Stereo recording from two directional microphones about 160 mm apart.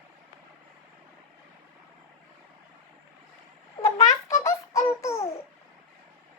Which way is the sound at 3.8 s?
20° left (ahead or behind).